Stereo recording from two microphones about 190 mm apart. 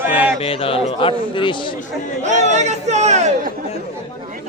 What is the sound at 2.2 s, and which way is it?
Chatter, 35° right (ahead or behind).